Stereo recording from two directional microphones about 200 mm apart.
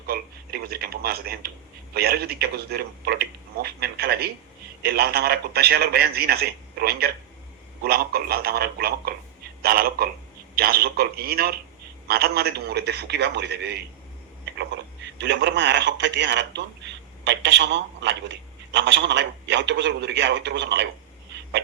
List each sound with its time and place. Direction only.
0.1 s a man's voice: 50° right (ahead or behind)
15.2 s speech: 60° right (ahead or behind)